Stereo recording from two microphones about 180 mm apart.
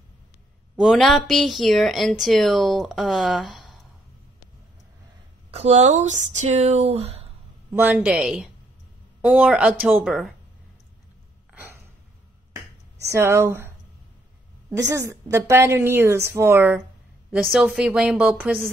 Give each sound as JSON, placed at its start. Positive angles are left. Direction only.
{"t": 0.7, "sound": "speech", "side_deg": 0}
{"t": 5.5, "sound": "speech", "side_deg": -35}
{"t": 7.7, "sound": "a woman's voice", "side_deg": -10}
{"t": 11.5, "sound": "a sound", "side_deg": -10}
{"t": 13.1, "sound": "a woman's voice", "side_deg": -15}
{"t": 14.7, "sound": "a woman's voice", "side_deg": -15}